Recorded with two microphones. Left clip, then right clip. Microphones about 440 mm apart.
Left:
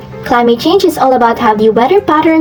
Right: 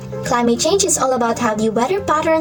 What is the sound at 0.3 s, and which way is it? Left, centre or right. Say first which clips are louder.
Speech: left 7 dB; right.